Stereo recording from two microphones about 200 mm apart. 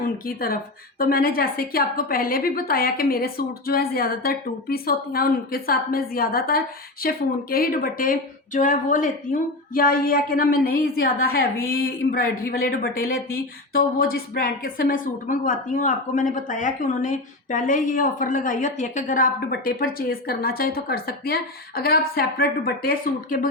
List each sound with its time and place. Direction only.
0.0 s speech: 45° left (ahead or behind)